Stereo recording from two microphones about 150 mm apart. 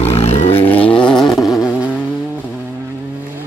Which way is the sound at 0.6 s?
10° left (ahead or behind).